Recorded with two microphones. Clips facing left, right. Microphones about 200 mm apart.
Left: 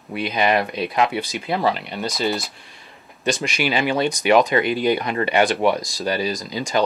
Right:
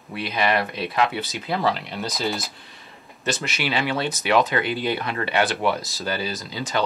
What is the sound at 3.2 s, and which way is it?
Speech, 15° left (ahead or behind).